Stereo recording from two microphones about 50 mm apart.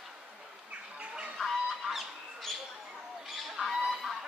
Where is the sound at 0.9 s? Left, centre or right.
Right.